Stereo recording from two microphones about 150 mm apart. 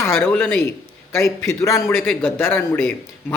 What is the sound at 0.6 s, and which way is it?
A man's voice, 20° left (ahead or behind).